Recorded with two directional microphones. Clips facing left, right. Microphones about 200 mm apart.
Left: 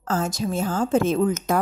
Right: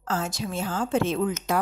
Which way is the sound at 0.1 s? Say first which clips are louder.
Left 5 dB; 45° left (ahead or behind).